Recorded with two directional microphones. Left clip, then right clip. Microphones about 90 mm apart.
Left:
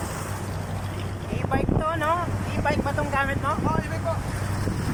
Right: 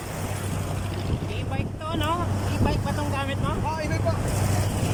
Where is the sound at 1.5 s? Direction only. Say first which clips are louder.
Left 12 dB; 15° right (ahead or behind).